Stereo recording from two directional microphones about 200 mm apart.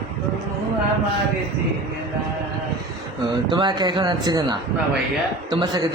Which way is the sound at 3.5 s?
25° right (ahead or behind).